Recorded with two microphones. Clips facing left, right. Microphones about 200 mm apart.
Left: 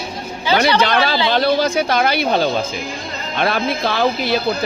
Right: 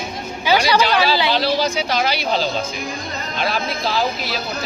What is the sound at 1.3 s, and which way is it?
Speech, 55° left (ahead or behind).